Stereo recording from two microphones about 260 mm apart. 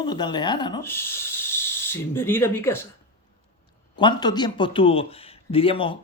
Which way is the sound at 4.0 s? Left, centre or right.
Centre.